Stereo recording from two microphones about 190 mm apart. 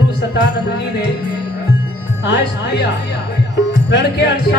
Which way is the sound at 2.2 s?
65° left (ahead or behind).